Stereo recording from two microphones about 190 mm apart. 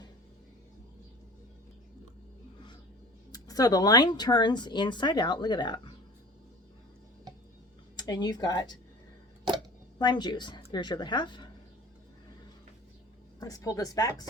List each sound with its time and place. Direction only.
3.3 s speech: 20° left (ahead or behind)
7.9 s speech: 20° left (ahead or behind)
10.0 s speech: 25° left (ahead or behind)
13.4 s speech: 20° left (ahead or behind)